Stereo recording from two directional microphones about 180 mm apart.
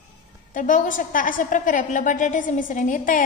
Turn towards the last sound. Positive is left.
turn(degrees=45)  # may be behind; listen again after turning